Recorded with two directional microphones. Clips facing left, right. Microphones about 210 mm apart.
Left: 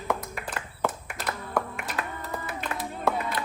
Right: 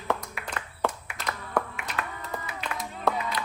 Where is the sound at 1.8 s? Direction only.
40° left (ahead or behind).